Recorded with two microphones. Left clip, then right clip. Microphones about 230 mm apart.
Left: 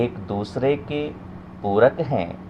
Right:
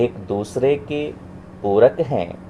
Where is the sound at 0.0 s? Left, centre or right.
Left.